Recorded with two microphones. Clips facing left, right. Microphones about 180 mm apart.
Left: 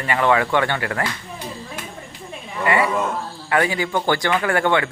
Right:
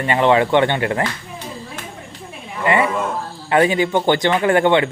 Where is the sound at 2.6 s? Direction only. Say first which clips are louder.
Right 2 dB; 25° right (ahead or behind).